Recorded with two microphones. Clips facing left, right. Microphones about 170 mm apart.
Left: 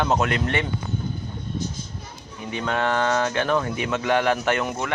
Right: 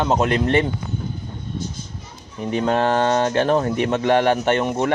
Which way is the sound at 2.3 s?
40° right (ahead or behind).